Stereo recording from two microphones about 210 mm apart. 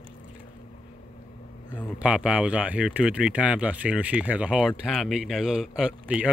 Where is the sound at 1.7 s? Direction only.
5° right (ahead or behind).